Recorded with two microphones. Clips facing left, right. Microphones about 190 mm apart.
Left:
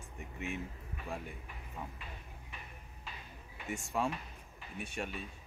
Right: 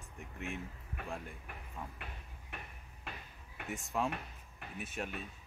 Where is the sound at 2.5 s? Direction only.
60° right (ahead or behind).